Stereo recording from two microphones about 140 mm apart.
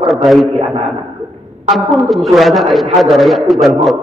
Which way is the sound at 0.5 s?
45° right (ahead or behind).